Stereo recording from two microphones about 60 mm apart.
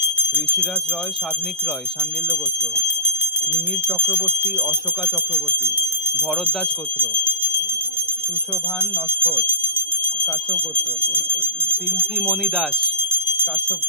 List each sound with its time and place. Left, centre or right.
0.0 s bell: right
4.1 s speech: right
7.1 s clock: right
8.8 s speech: right
12.2 s speech: centre